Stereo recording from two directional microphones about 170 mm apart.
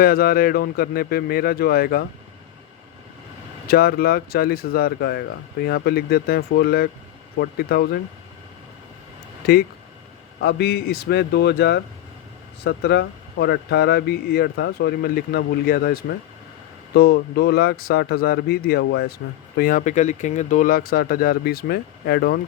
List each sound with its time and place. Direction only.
0.0 s speech: 60° left (ahead or behind)
3.7 s speech: 65° left (ahead or behind)
9.4 s speech: 65° left (ahead or behind)
19.5 s speech: 55° left (ahead or behind)